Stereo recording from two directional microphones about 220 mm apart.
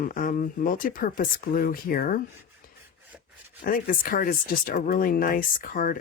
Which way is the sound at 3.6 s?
40° left (ahead or behind).